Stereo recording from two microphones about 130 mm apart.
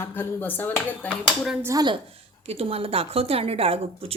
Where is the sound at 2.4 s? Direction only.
50° right (ahead or behind).